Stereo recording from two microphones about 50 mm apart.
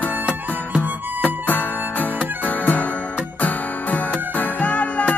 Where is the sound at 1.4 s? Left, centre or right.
Left.